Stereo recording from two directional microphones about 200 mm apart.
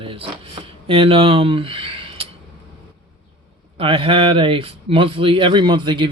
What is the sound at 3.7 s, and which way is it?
Speech, 25° right (ahead or behind).